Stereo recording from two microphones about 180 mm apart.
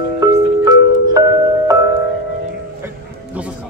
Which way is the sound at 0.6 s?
20° right (ahead or behind).